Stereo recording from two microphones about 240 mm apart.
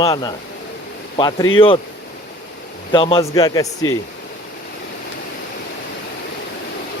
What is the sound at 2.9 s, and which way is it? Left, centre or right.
Speech, left.